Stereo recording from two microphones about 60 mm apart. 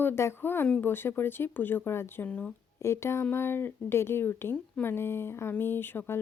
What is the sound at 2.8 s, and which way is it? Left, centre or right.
Speech, left.